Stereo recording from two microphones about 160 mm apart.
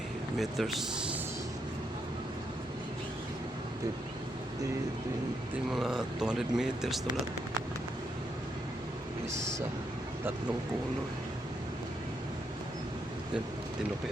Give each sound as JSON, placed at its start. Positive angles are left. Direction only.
{"t": 0.3, "sound": "speech", "side_deg": 0}
{"t": 5.7, "sound": "speech", "side_deg": 0}